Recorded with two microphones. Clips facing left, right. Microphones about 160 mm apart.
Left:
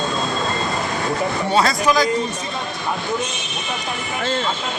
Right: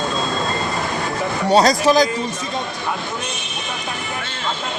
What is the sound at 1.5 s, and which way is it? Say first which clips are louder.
Speech: right 5 dB; 35° right (ahead or behind).